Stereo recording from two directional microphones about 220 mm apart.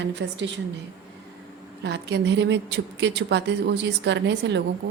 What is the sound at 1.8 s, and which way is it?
A woman's voice, 50° right (ahead or behind).